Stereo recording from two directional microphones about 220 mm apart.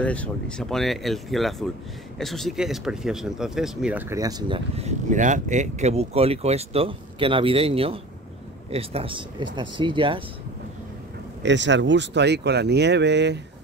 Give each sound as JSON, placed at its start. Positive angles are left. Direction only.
{"t": 0.0, "sound": "speech", "side_deg": 5}
{"t": 11.4, "sound": "speech", "side_deg": -55}